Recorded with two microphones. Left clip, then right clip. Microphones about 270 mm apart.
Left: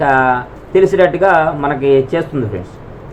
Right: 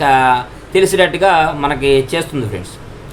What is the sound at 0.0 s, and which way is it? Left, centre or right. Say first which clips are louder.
Speech: right 1 dB; right.